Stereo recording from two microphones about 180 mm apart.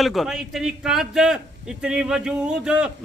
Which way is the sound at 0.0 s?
Centre (ahead or behind).